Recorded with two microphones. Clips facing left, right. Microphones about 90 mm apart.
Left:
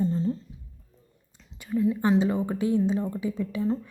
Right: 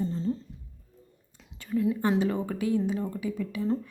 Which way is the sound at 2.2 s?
20° left (ahead or behind).